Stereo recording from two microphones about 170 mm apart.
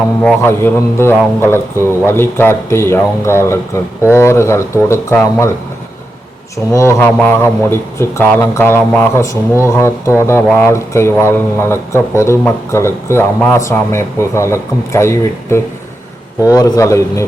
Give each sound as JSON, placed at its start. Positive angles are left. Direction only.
{"t": 0.2, "sound": "a man's voice", "side_deg": 10}
{"t": 6.7, "sound": "a man's voice", "side_deg": 15}